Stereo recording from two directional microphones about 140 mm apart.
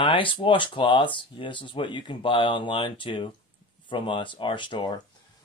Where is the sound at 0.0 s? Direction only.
35° left (ahead or behind).